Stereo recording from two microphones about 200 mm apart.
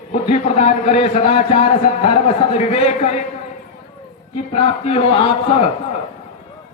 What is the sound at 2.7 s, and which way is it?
Speech, 35° left (ahead or behind).